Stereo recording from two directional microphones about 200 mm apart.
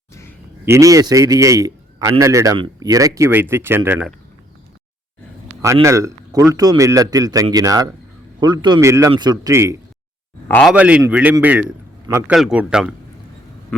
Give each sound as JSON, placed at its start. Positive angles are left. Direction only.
{"t": 0.1, "sound": "a sound", "side_deg": 15}
{"t": 0.6, "sound": "a man's voice", "side_deg": -15}
{"t": 5.8, "sound": "a man's voice", "side_deg": -15}
{"t": 10.5, "sound": "speech", "side_deg": 0}